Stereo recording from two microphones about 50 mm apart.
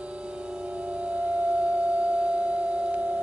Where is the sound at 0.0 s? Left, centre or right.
Right.